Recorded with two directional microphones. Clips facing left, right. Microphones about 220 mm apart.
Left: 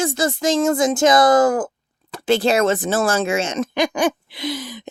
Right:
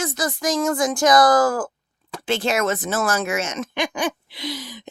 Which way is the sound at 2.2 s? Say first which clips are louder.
Left 5 dB; 35° left (ahead or behind).